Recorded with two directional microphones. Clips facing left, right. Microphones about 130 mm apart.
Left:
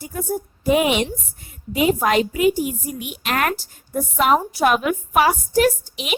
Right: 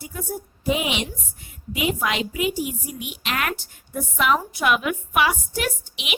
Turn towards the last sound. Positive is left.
turn(degrees=40)  # may be behind; listen again after turning